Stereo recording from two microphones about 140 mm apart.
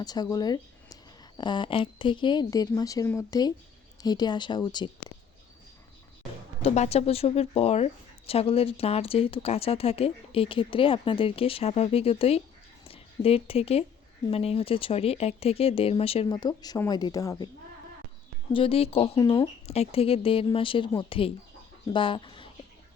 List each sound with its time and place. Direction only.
0.0 s a woman's voice: 30° left (ahead or behind)
6.6 s speech: 50° left (ahead or behind)
16.3 s a woman's voice: 30° left (ahead or behind)
18.5 s speech: 40° left (ahead or behind)
19.2 s a woman's voice: 30° left (ahead or behind)
19.6 s speech: 50° left (ahead or behind)